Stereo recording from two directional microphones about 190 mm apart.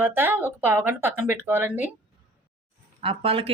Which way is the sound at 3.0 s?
30° right (ahead or behind).